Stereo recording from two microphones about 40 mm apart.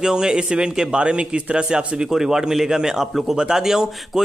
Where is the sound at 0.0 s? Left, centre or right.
Centre.